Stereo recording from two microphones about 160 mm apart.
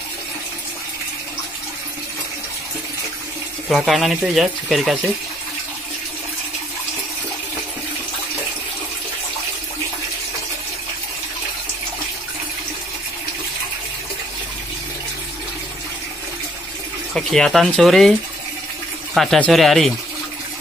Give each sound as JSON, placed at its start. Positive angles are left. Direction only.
{"t": 3.6, "sound": "speech", "side_deg": 0}
{"t": 17.1, "sound": "speech", "side_deg": 0}
{"t": 19.1, "sound": "speech", "side_deg": 0}